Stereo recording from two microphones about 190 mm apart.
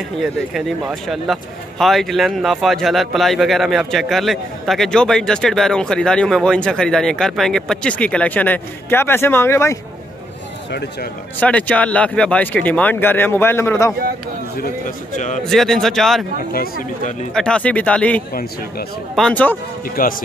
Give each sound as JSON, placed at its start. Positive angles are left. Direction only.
{"t": 0.2, "sound": "speech", "side_deg": 0}
{"t": 10.7, "sound": "speech", "side_deg": 60}
{"t": 11.3, "sound": "speech", "side_deg": 5}
{"t": 15.1, "sound": "a man's voice", "side_deg": 40}
{"t": 15.4, "sound": "speech", "side_deg": 0}
{"t": 16.5, "sound": "speech", "side_deg": 50}
{"t": 17.3, "sound": "speech", "side_deg": 5}
{"t": 20.0, "sound": "speech", "side_deg": 50}